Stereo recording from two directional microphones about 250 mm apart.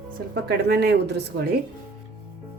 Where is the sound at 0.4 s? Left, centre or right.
Right.